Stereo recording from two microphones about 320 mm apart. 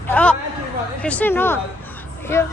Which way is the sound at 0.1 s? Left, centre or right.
Centre.